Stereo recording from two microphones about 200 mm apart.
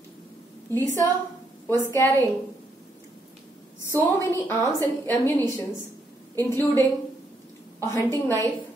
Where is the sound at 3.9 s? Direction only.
15° left (ahead or behind).